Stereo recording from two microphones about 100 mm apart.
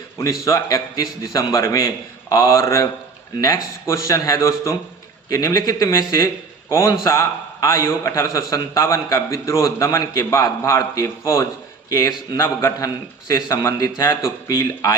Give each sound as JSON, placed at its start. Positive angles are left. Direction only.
{"t": 0.4, "sound": "a man's voice", "side_deg": 35}